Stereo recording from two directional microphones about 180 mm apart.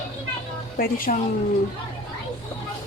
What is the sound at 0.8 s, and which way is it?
Speech, 55° left (ahead or behind).